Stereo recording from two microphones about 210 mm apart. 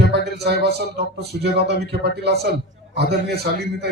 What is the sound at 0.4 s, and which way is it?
A man's voice, 50° right (ahead or behind).